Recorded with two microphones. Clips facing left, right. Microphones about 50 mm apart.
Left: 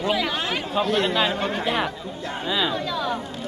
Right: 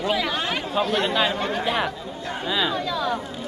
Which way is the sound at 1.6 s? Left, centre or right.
Centre.